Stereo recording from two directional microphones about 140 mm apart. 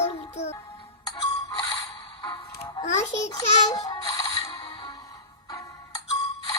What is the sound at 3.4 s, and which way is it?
Music, 25° left (ahead or behind).